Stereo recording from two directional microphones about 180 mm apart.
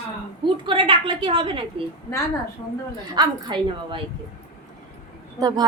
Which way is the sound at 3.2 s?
25° right (ahead or behind).